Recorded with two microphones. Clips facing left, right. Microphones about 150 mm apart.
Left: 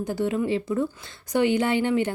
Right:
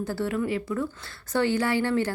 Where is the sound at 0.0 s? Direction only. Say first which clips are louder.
Left 2 dB; 20° left (ahead or behind).